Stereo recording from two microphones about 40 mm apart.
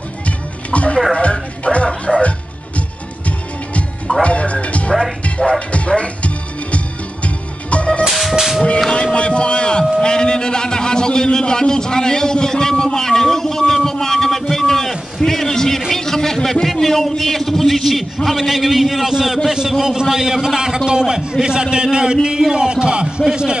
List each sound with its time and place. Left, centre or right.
0.7 s music: left
2.1 s music: centre
4.2 s music: left
8.1 s music: centre
9.1 s a sound: left; by 18.0 s centre
18.2 s a man's voice: centre
22.5 s music: right
23.3 s a man's voice: right